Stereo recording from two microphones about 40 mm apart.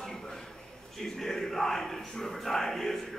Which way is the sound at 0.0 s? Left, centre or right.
Centre.